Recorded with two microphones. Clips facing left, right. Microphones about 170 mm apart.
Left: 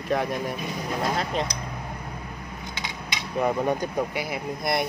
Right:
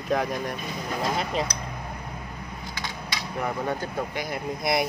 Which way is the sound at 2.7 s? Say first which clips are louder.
Even; 20° left (ahead or behind).